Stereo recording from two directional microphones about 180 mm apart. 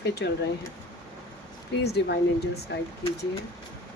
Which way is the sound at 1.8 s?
65° left (ahead or behind).